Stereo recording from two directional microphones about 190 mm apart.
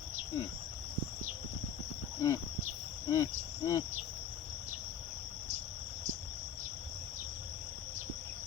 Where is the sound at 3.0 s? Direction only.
20° left (ahead or behind).